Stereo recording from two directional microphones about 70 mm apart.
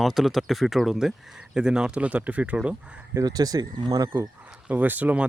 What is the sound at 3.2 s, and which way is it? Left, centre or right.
Speech, right.